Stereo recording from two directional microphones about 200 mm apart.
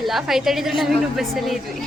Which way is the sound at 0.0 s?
Centre (ahead or behind).